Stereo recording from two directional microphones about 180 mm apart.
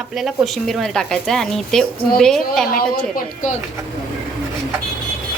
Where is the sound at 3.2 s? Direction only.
45° left (ahead or behind).